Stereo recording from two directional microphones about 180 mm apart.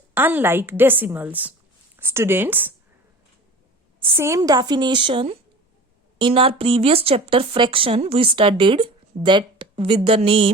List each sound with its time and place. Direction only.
0.1 s a woman's voice: 10° right (ahead or behind)
4.2 s speech: 15° right (ahead or behind)